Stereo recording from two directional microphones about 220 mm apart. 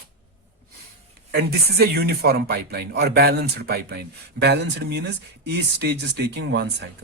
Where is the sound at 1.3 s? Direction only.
45° right (ahead or behind).